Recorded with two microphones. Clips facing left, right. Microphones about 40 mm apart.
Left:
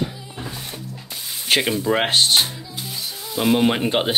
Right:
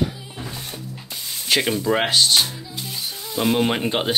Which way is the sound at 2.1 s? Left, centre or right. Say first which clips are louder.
Even; left.